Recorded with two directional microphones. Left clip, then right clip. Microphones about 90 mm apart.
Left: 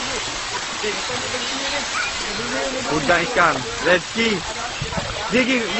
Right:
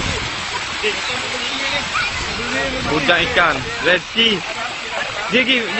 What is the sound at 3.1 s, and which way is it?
Speech, 20° right (ahead or behind).